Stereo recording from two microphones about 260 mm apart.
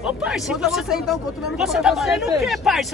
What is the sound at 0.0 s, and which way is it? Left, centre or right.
A man's voice, centre.